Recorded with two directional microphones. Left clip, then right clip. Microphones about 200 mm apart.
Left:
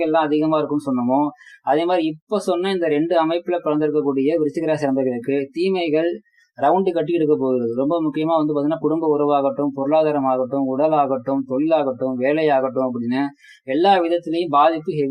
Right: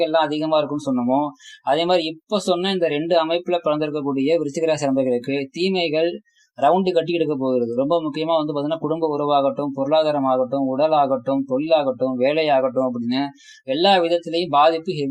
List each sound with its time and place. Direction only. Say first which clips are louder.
0.0 s speech: left 1 dB; 30° right (ahead or behind)